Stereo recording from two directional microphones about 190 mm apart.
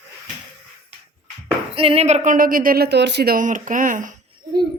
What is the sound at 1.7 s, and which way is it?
A woman's voice, 30° right (ahead or behind).